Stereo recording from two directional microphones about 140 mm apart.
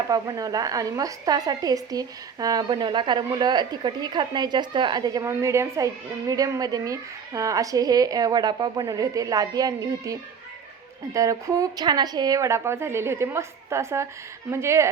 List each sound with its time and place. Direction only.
0.1 s a woman's voice: 25° right (ahead or behind)